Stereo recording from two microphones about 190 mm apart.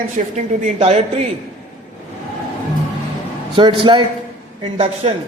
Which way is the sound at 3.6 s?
25° right (ahead or behind).